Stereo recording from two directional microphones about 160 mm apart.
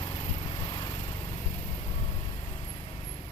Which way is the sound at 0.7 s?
25° left (ahead or behind).